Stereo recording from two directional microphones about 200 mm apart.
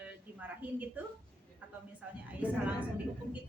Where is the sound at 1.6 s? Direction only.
10° right (ahead or behind).